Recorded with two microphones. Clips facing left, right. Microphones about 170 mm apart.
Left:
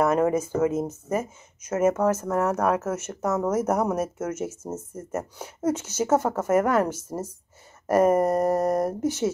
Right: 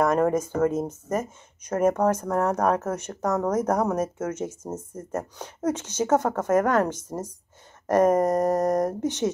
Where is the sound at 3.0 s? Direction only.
5° left (ahead or behind).